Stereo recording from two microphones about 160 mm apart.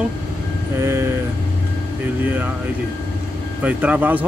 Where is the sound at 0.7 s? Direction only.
15° right (ahead or behind).